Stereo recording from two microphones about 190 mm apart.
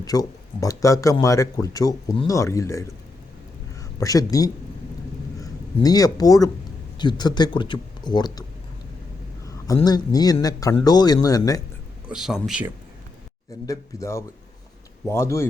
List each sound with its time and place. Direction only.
0.0 s speech: 20° left (ahead or behind)
9.7 s speech: 20° left (ahead or behind)
12.0 s speech: 5° right (ahead or behind)
13.7 s speech: 15° left (ahead or behind)